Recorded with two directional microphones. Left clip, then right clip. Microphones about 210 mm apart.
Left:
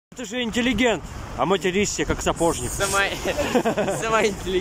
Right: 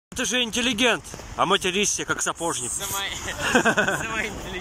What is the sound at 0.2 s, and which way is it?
Speech, 5° left (ahead or behind).